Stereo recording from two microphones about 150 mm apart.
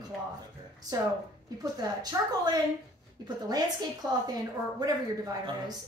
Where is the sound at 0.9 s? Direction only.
25° right (ahead or behind).